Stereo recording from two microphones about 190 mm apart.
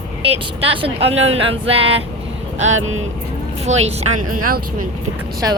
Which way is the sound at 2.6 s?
90° right.